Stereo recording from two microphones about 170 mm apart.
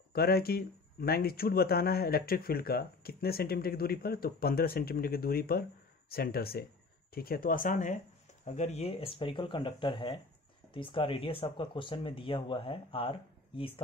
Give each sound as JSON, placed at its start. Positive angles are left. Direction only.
{"t": 0.1, "sound": "speech", "side_deg": 65}